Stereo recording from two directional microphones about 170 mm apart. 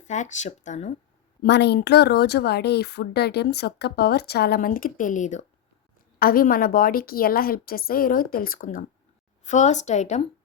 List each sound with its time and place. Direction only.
0.1 s a woman's voice: 45° left (ahead or behind)
1.4 s speech: 85° left; by 5.5 s 45° left (ahead or behind)
6.1 s a woman's voice: 60° left (ahead or behind); by 10.2 s 45° left (ahead or behind)